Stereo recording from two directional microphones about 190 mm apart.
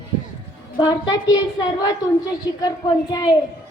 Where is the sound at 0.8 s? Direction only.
20° left (ahead or behind).